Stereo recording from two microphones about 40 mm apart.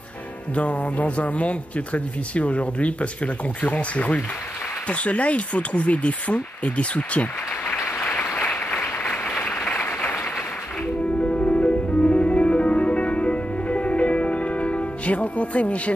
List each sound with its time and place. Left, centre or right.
0.6 s speech: left
9.7 s applause: left
11.1 s music: left